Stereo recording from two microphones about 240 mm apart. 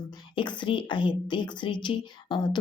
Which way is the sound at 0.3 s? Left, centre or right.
Centre.